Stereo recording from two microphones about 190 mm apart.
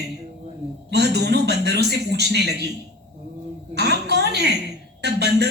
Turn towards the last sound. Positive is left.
turn(degrees=-60)  # may be behind; listen again after turning